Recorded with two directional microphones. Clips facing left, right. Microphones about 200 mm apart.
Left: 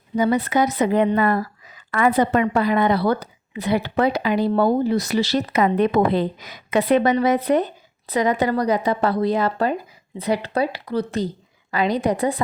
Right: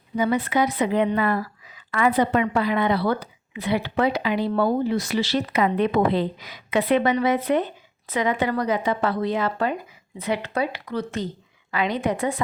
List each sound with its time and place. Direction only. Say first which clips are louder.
0.2 s a woman's voice: left 3 dB; 40° left (ahead or behind)